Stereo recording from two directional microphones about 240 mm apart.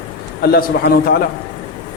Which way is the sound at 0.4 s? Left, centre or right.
Left.